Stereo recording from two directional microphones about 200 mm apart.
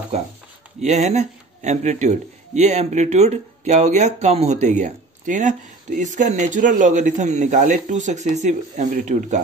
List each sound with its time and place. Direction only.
0.8 s speech: 35° right (ahead or behind)